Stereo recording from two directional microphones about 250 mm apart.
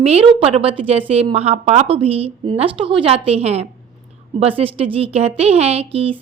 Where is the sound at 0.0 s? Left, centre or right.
Right.